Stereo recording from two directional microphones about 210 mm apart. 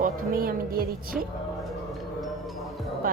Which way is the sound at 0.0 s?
45° right (ahead or behind).